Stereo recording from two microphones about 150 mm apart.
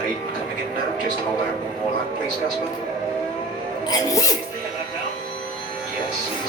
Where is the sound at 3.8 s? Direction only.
25° left (ahead or behind).